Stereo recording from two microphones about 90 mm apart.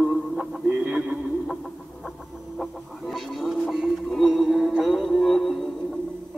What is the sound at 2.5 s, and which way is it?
Music, centre (ahead or behind).